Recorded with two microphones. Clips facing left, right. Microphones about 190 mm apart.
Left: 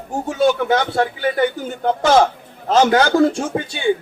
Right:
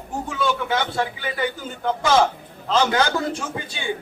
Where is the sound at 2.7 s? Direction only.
45° left (ahead or behind).